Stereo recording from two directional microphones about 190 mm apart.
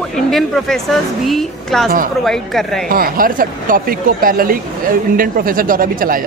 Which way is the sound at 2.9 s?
50° right (ahead or behind).